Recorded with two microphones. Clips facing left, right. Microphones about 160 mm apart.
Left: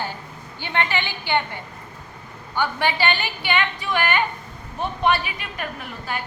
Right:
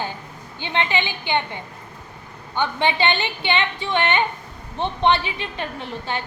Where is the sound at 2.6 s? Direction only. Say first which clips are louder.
Right 1 dB; 20° right (ahead or behind).